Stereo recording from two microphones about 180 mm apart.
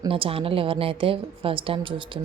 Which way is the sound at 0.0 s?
30° right (ahead or behind).